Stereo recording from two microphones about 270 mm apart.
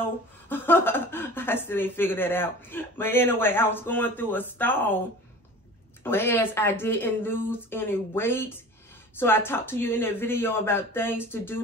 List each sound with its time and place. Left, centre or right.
0.5 s a woman's voice: centre
6.0 s a woman's voice: centre